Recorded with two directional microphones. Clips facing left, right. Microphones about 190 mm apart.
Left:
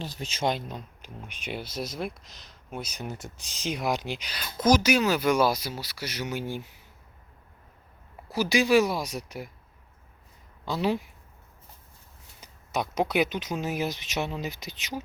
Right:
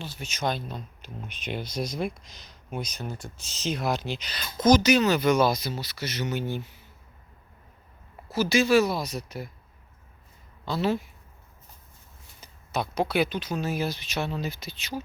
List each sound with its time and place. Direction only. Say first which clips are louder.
0.0 s speech: left 2 dB; 35° left (ahead or behind); by 2.9 s centre (ahead or behind)
2.9 s speech: even; 15° left (ahead or behind)
8.3 s speech: right 1 dB; 15° left (ahead or behind)
10.7 s speech: right 1 dB; 15° left (ahead or behind)
12.4 s speech: even; 15° left (ahead or behind)